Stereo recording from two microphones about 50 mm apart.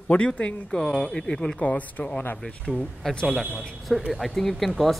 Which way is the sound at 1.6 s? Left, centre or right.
Left.